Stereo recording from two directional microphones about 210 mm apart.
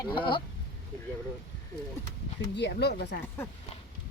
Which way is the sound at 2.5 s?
55° left (ahead or behind).